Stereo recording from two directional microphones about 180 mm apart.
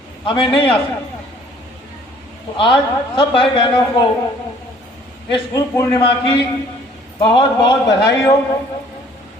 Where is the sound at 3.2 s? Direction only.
30° left (ahead or behind).